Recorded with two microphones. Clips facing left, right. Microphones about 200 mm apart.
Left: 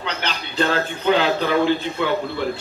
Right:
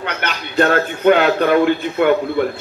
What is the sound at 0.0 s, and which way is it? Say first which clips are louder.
A man's voice: right 3 dB; 55° right (ahead or behind).